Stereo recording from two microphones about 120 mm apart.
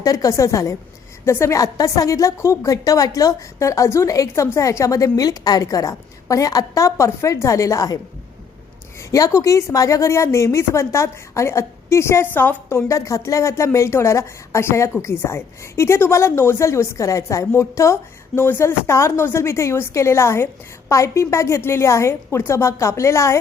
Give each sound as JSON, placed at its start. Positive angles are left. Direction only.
{"t": 0.0, "sound": "a woman's voice", "side_deg": 30}
{"t": 9.1, "sound": "a woman's voice", "side_deg": 30}